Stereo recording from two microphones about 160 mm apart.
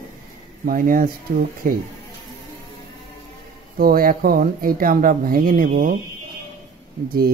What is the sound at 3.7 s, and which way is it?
Speech, 65° right (ahead or behind).